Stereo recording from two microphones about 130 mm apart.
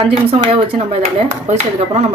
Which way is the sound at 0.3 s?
45° right (ahead or behind).